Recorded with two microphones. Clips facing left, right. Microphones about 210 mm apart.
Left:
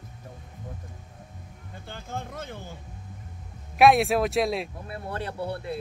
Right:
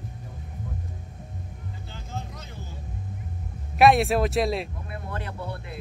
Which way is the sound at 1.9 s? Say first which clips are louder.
Left 4 dB; 55° left (ahead or behind).